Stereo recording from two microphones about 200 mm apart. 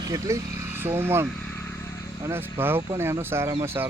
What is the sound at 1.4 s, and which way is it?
Vehicle, 5° left (ahead or behind).